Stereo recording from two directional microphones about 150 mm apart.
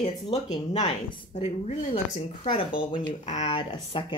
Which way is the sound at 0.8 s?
50° left (ahead or behind).